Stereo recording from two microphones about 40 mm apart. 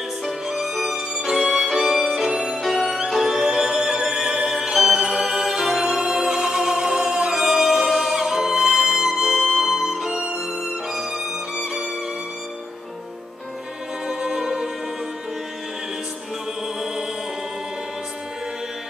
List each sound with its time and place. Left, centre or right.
0.2 s violin: centre
0.9 s music: centre
1.9 s violin: centre
2.5 s music: centre
14.0 s music: centre